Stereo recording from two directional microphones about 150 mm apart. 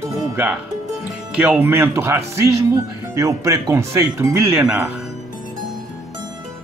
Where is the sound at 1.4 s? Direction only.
10° right (ahead or behind).